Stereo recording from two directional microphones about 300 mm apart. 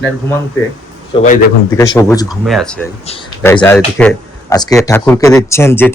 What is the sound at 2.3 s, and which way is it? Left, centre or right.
Speech, centre.